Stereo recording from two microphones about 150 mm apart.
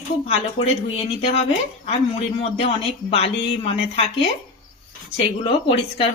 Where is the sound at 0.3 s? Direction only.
45° left (ahead or behind).